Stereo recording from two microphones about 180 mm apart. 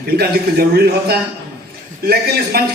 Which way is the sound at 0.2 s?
60° right (ahead or behind).